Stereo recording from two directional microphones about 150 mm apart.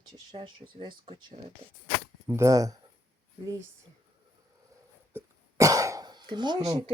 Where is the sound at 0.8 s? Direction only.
40° right (ahead or behind).